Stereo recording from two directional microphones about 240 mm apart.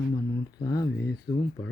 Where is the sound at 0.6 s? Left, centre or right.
Centre.